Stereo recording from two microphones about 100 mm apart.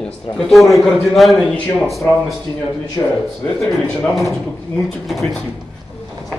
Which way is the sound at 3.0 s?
25° left (ahead or behind).